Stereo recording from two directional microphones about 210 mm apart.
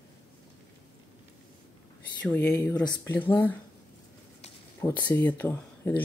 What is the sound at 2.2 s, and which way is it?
Speech, 5° left (ahead or behind).